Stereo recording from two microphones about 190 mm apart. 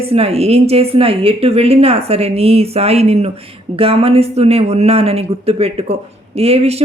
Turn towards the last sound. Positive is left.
turn(degrees=-35)  # may be behind; listen again after turning